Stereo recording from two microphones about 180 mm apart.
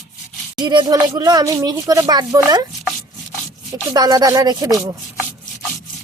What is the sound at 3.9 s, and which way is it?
Speech, 20° right (ahead or behind).